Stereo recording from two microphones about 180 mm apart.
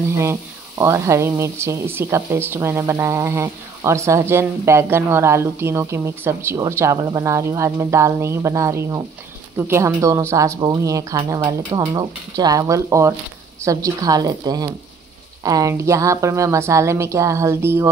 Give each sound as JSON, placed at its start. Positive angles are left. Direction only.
{"t": 0.2, "sound": "a woman's voice", "side_deg": -15}